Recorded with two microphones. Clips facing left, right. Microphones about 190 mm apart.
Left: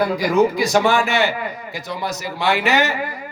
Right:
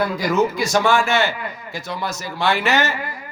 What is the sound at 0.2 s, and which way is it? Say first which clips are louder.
A man's voice: left 3 dB; 15° left (ahead or behind).